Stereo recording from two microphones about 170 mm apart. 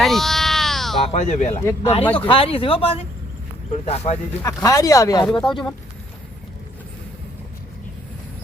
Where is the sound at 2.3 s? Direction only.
35° left (ahead or behind).